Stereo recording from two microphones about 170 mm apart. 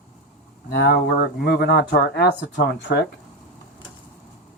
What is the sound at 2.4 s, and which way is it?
Speech, 90° left.